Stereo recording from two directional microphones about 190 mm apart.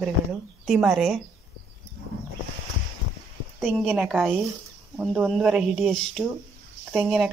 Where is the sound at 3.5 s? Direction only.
Centre (ahead or behind).